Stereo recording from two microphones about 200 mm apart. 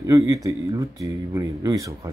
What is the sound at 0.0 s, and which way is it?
Speech, 15° right (ahead or behind).